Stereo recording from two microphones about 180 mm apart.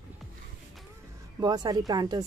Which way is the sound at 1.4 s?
20° right (ahead or behind).